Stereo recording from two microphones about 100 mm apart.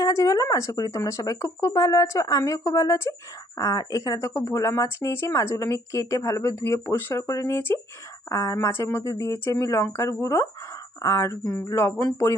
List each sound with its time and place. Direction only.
0.0 s speech: 35° left (ahead or behind)